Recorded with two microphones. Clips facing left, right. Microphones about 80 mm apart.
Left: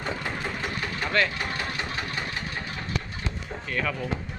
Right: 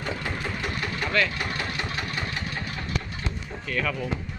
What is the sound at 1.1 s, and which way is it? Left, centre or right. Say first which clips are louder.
Speech: left 1 dB; left.